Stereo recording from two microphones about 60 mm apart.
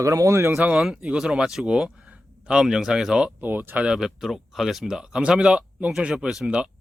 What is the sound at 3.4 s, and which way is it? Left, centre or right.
Speech, right.